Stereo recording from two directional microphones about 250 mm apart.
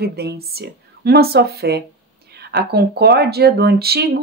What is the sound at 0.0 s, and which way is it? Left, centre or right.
Speech, right.